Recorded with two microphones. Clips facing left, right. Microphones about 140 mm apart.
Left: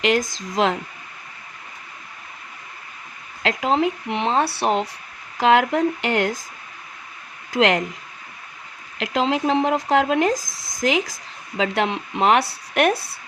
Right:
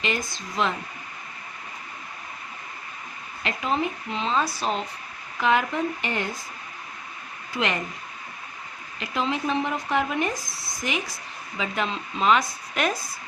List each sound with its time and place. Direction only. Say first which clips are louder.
0.0 s speech: left 8 dB; 90° left
3.4 s speech: left 6 dB; 90° left
5.4 s speech: left 6 dB; 90° left
7.5 s speech: left 9 dB; 90° left
9.0 s speech: left 6 dB; 90° left; by 13.1 s 70° left (ahead or behind)